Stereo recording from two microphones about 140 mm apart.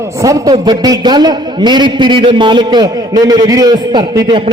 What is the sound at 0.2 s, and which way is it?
A man's voice, 25° right (ahead or behind).